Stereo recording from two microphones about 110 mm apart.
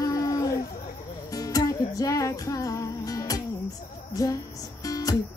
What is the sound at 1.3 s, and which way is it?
Music, 35° left (ahead or behind).